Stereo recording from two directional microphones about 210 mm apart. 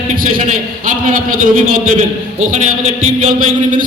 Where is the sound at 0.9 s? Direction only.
40° right (ahead or behind).